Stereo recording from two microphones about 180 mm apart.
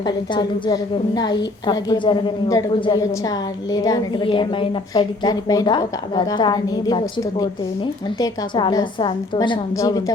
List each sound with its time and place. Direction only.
0.0 s a woman's voice: 25° left (ahead or behind)
8.2 s a woman's voice: 25° left (ahead or behind)